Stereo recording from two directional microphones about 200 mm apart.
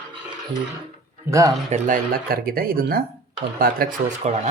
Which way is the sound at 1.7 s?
40° right (ahead or behind).